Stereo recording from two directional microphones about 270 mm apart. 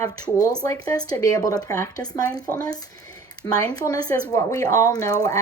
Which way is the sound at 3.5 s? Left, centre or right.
Centre.